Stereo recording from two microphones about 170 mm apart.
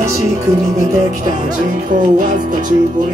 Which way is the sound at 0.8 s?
50° right (ahead or behind).